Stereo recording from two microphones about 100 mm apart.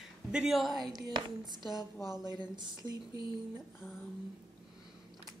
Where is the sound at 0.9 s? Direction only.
45° right (ahead or behind).